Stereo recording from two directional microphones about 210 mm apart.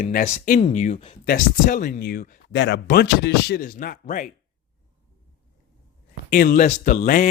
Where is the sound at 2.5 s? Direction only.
55° left (ahead or behind).